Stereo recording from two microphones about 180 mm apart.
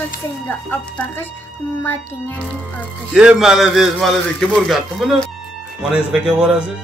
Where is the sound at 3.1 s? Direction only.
5° right (ahead or behind).